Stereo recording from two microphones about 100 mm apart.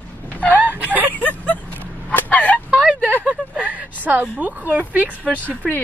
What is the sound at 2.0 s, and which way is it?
Fowl, 15° left (ahead or behind).